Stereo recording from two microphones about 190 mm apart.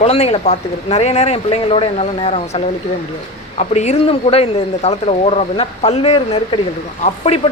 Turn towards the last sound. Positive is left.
turn(degrees=35)  # may be behind; listen again after turning